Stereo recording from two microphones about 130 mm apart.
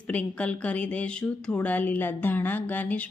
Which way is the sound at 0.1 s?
10° left (ahead or behind).